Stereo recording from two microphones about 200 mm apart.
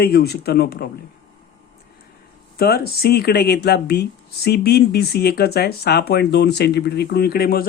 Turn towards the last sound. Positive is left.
turn(degrees=50)  # may be behind; listen again after turning